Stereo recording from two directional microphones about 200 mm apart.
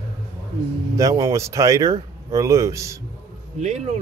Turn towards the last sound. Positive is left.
turn(degrees=-35)  # may be behind; listen again after turning